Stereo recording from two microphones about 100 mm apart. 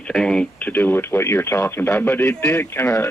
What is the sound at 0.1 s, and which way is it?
Speech, 5° left (ahead or behind).